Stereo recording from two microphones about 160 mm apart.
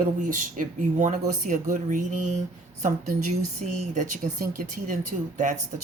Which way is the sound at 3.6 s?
50° right (ahead or behind).